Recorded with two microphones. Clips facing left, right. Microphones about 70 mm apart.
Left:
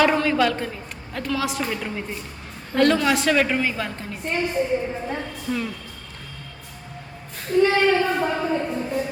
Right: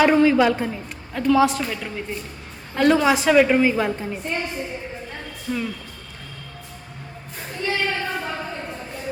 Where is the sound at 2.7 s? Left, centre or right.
Centre.